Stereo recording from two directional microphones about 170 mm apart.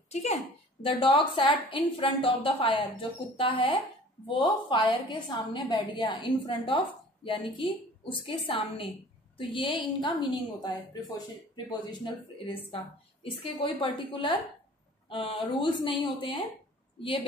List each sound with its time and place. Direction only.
0.1 s a woman's voice: 40° left (ahead or behind)
13.2 s a woman's voice: 30° left (ahead or behind)